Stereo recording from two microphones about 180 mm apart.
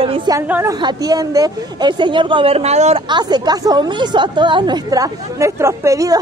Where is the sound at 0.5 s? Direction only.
10° right (ahead or behind).